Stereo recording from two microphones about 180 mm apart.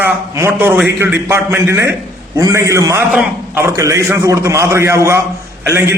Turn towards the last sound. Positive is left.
turn(degrees=-15)  # may be behind; listen again after turning